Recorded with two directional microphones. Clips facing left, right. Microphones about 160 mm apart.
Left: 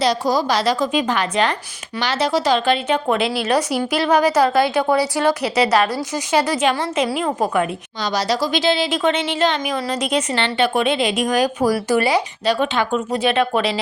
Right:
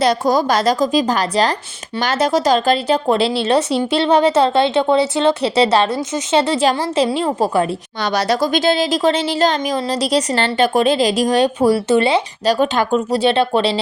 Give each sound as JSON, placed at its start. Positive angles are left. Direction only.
{"t": 0.0, "sound": "a woman's voice", "side_deg": -50}
{"t": 2.0, "sound": "a woman's voice", "side_deg": -45}
{"t": 8.0, "sound": "a woman's voice", "side_deg": -60}
{"t": 12.5, "sound": "a woman's voice", "side_deg": -40}